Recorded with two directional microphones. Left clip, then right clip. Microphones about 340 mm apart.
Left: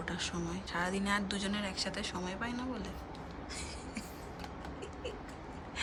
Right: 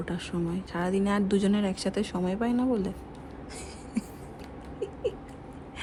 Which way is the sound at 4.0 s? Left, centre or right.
Centre.